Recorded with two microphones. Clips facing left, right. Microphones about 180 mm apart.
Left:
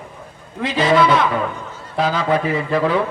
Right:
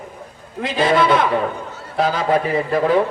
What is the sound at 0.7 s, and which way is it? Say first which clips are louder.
A man's voice: left 1 dB; 50° right (ahead or behind).